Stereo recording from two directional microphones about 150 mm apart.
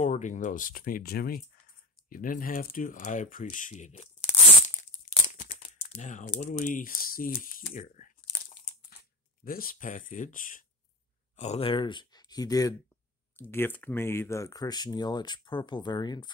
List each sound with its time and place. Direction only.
0.0 s speech: 55° left (ahead or behind); by 1.4 s 85° left
2.0 s speech: 65° left (ahead or behind); by 4.3 s 45° left (ahead or behind)
5.3 s crumpling: 60° left (ahead or behind)
5.8 s speech: 50° left (ahead or behind)
9.4 s speech: 75° left (ahead or behind)
11.3 s speech: 45° left (ahead or behind); by 16.3 s 30° left (ahead or behind)